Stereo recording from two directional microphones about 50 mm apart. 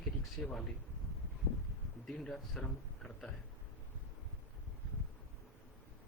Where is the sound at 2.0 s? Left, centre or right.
Centre.